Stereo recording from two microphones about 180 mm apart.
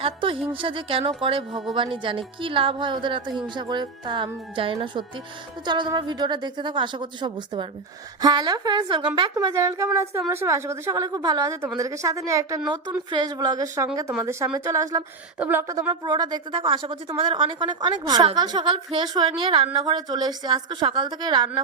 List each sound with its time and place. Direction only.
0.0 s a woman's voice: 30° right (ahead or behind)